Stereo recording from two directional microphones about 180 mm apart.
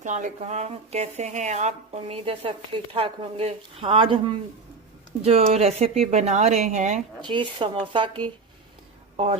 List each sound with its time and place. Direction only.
0.0 s speech: 45° right (ahead or behind)
7.2 s speech: 25° right (ahead or behind)